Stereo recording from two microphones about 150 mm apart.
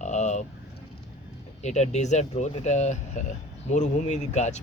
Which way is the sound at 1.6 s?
50° left (ahead or behind).